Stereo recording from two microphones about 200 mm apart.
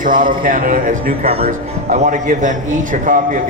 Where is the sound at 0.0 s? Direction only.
45° right (ahead or behind).